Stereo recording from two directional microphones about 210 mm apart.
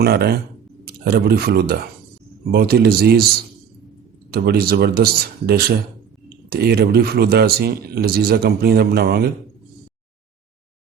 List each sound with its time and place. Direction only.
0.0 s speech: 50° right (ahead or behind)
4.3 s speech: 50° right (ahead or behind)